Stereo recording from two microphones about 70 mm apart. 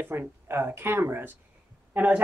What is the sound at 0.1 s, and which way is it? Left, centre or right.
Speech, right.